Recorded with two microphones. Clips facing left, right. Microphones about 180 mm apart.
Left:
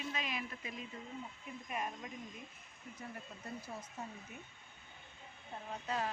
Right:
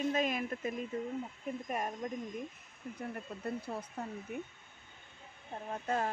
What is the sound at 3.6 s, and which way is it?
Speech, 60° right (ahead or behind).